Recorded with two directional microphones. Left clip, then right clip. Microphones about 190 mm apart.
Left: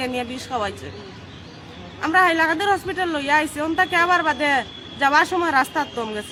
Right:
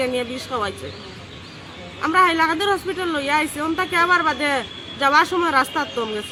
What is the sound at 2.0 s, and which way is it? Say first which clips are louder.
Speech: even; 25° left (ahead or behind).